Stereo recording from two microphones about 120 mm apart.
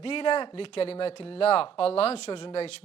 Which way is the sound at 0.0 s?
50° left (ahead or behind).